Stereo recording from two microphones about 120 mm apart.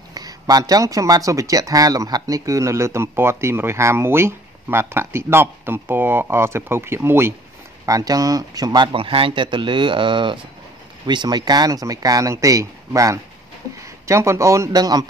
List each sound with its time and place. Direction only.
0.1 s speech: 35° right (ahead or behind)